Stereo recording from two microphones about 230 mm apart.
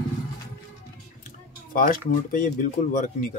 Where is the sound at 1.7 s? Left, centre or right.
Left.